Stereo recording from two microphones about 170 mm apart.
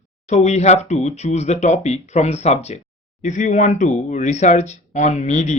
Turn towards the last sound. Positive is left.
turn(degrees=45)  # may be behind; listen again after turning